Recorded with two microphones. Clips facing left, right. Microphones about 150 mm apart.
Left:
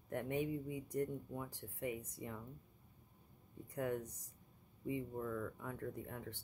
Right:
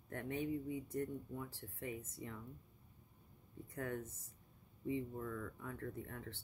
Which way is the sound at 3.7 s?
15° left (ahead or behind).